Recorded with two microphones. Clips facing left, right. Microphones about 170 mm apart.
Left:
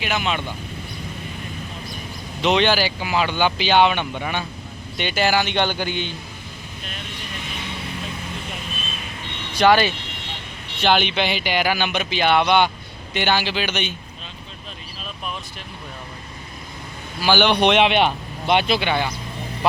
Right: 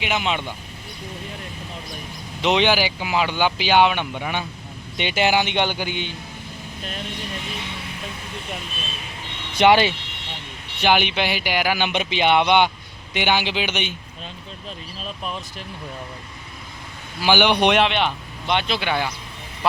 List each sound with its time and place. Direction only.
0.1 s speech: 20° right (ahead or behind)
2.4 s speech: 15° right (ahead or behind)
9.6 s speech: 25° right (ahead or behind)
10.8 s speech: 10° right (ahead or behind)
17.2 s speech: 15° right (ahead or behind)
17.7 s speech: 10° left (ahead or behind)
18.8 s speech: 5° right (ahead or behind)